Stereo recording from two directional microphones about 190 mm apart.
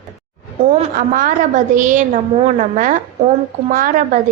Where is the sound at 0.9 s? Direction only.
45° right (ahead or behind).